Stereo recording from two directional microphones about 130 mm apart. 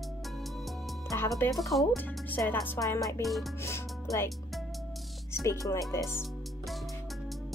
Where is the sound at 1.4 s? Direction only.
15° left (ahead or behind).